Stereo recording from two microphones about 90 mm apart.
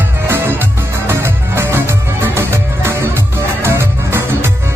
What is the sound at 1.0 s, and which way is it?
Music, 30° right (ahead or behind).